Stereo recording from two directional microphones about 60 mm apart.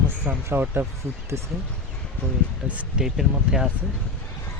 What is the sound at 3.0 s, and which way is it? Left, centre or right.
Speech, centre.